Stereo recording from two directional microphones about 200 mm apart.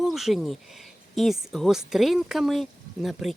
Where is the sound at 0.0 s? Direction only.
Centre (ahead or behind).